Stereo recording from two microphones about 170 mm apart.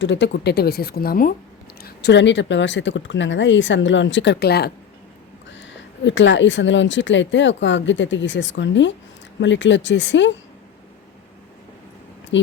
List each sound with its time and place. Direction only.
0.0 s speech: 90° left; by 1.3 s 60° left (ahead or behind)
1.8 s speech: 80° left
5.5 s speech: 90° left
12.3 s speech: 90° left